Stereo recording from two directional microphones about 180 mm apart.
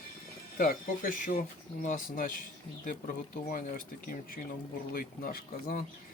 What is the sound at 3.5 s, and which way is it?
Speech, 50° left (ahead or behind).